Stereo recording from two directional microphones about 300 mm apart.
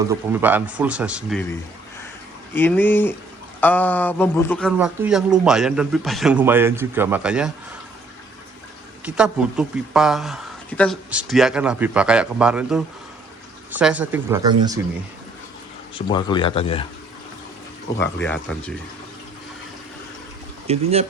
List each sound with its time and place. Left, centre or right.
0.1 s speech: centre
2.6 s speech: centre
9.0 s speech: centre
16.0 s speech: centre
18.0 s speech: centre
20.7 s speech: right